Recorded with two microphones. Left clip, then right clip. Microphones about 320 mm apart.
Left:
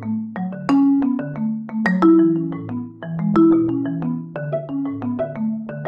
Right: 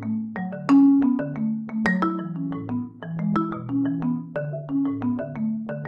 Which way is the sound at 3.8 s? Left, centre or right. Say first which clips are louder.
Left 1 dB; centre.